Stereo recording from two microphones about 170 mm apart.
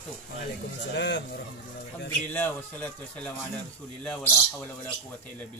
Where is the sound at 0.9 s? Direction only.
85° left.